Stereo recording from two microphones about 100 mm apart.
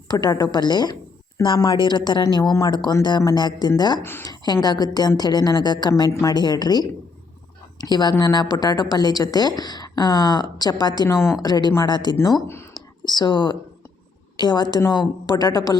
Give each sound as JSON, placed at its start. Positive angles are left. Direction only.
{"t": 0.1, "sound": "a woman's voice", "side_deg": 40}
{"t": 4.0, "sound": "speech", "side_deg": 25}
{"t": 4.6, "sound": "a woman's voice", "side_deg": 40}
{"t": 6.1, "sound": "speech", "side_deg": 25}
{"t": 6.3, "sound": "a woman's voice", "side_deg": 45}
{"t": 11.1, "sound": "speech", "side_deg": 25}
{"t": 11.4, "sound": "a woman's voice", "side_deg": 40}